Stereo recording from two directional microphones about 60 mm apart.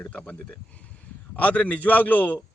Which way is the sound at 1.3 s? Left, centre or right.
Left.